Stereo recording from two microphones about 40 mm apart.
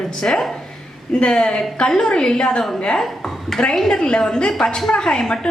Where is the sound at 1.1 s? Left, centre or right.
Left.